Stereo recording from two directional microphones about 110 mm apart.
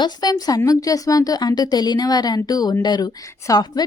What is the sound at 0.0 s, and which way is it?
Speech, 35° left (ahead or behind).